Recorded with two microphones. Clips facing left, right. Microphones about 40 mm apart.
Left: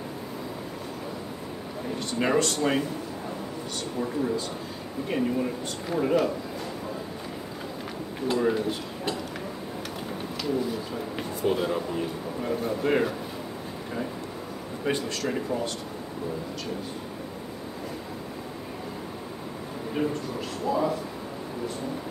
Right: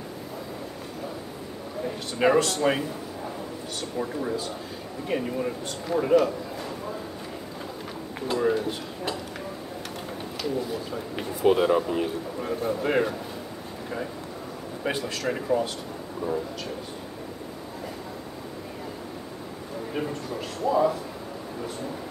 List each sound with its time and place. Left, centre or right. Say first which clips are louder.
2.0 s speech: right 3 dB; centre
4.0 s speech: left 2 dB; centre
8.3 s speech: even; centre
10.4 s speech: left 1 dB; centre
11.4 s speech: right 6 dB; centre
12.4 s speech: even; centre
14.9 s speech: even; centre
19.9 s speech: left 3 dB; centre